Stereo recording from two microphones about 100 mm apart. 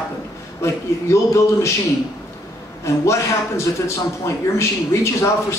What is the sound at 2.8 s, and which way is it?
Speech, 30° left (ahead or behind).